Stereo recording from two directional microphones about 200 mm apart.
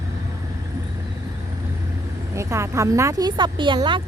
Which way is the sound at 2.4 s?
15° right (ahead or behind).